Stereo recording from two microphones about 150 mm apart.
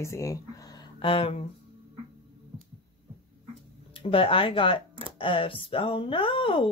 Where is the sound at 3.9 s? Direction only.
35° left (ahead or behind).